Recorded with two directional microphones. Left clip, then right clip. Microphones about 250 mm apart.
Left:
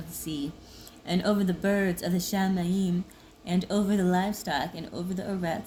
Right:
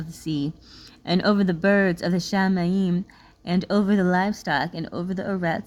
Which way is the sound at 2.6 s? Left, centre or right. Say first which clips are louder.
Right 5 dB; right.